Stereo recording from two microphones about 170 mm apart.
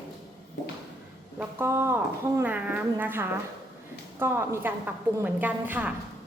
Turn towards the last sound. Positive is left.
turn(degrees=-10)  # may be behind; listen again after turning